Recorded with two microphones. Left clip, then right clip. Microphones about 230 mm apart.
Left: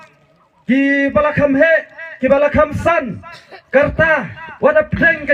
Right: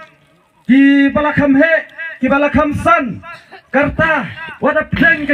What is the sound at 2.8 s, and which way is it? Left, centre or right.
Speech, left.